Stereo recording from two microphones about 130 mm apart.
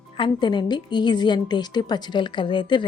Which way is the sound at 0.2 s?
35° left (ahead or behind).